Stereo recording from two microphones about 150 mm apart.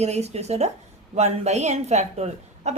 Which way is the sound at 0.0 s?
45° right (ahead or behind).